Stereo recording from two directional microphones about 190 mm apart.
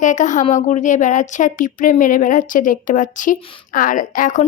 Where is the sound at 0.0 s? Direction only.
40° left (ahead or behind).